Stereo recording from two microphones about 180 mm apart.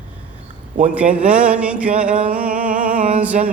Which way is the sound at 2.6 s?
45° right (ahead or behind).